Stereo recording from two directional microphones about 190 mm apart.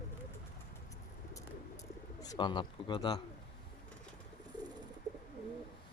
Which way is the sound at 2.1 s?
20° left (ahead or behind).